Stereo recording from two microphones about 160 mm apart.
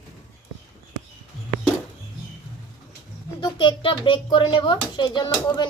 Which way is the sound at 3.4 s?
30° left (ahead or behind).